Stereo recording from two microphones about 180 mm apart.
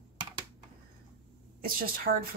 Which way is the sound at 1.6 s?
55° right (ahead or behind).